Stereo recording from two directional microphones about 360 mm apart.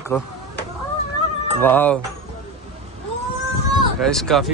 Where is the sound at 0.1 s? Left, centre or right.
Centre.